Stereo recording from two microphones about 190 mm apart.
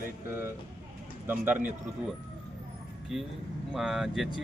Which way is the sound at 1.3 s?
10° right (ahead or behind).